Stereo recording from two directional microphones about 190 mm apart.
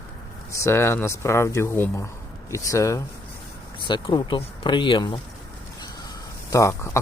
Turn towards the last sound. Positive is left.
turn(degrees=15)  # may be behind; listen again after turning